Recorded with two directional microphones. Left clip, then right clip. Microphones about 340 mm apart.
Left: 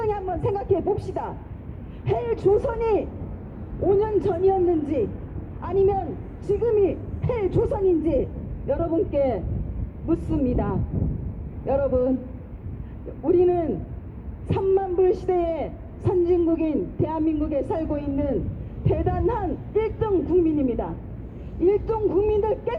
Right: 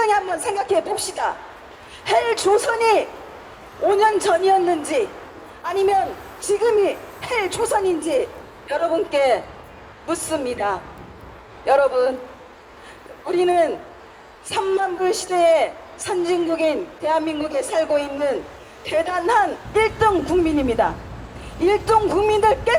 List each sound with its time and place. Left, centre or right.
0.0 s a woman's voice: right
13.3 s a man's voice: right